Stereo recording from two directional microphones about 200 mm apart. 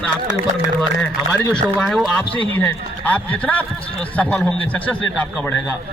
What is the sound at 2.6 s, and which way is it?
A man's voice, 10° left (ahead or behind).